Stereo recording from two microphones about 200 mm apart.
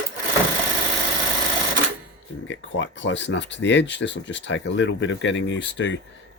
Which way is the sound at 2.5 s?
65° left (ahead or behind).